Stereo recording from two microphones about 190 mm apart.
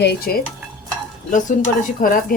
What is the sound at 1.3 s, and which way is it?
Speech, 45° left (ahead or behind).